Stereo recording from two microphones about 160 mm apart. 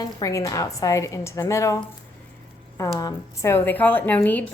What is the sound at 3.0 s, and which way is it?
A woman's voice, 20° left (ahead or behind).